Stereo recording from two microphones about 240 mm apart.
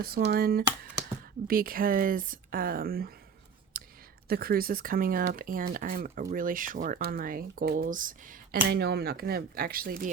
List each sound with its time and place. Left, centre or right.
0.0 s speech: right
3.7 s a sound: right
4.3 s speech: right